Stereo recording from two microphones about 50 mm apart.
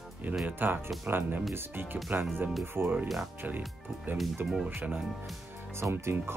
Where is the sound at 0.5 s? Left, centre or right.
Right.